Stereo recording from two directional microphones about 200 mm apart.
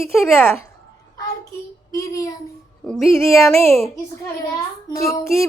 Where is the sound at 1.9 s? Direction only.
15° left (ahead or behind).